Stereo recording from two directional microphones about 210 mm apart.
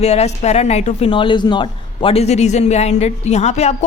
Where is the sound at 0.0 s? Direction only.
30° left (ahead or behind).